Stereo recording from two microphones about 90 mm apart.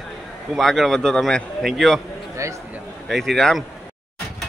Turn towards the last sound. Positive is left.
turn(degrees=5)  # may be behind; listen again after turning